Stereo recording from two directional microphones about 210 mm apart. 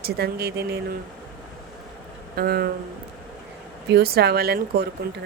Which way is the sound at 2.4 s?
45° right (ahead or behind).